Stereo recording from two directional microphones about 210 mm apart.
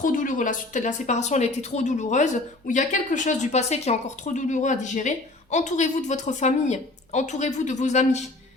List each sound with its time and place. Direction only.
0.0 s speech: 40° left (ahead or behind)